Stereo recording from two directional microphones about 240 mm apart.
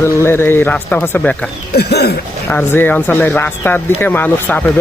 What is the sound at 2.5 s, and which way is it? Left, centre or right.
Speech, centre.